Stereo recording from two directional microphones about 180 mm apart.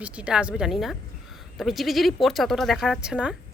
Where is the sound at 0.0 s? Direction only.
5° right (ahead or behind).